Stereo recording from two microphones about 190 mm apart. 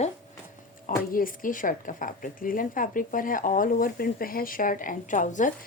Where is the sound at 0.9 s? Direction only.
45° left (ahead or behind).